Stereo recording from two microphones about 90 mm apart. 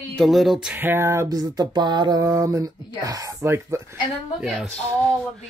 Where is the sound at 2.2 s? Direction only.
35° right (ahead or behind).